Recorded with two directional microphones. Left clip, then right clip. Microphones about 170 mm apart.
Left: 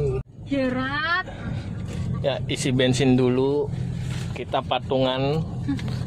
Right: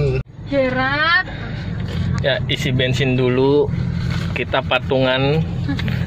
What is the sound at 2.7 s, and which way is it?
Speech, 30° left (ahead or behind).